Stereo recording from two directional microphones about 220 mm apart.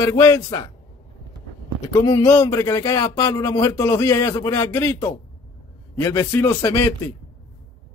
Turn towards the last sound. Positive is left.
turn(degrees=15)  # may be behind; listen again after turning